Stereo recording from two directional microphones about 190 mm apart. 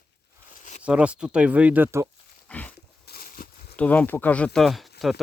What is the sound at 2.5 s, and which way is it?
Dog, 5° left (ahead or behind).